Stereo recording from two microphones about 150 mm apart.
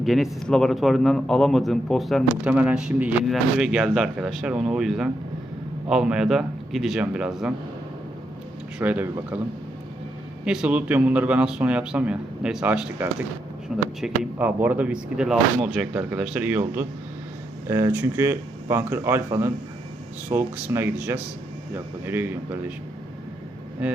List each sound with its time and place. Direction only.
0.0 s a man's voice: centre (ahead or behind)
8.8 s a man's voice: 10° right (ahead or behind)
10.4 s a man's voice: 5° right (ahead or behind)
23.8 s a man's voice: 5° right (ahead or behind)